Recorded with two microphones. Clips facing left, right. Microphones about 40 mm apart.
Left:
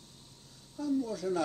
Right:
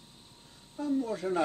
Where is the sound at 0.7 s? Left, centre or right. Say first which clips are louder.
Right 1 dB; right.